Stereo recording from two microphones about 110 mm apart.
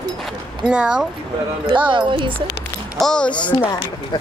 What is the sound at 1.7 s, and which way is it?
Speech, 45° right (ahead or behind).